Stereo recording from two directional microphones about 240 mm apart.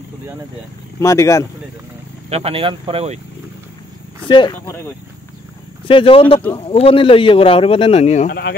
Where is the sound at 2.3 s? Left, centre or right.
Right.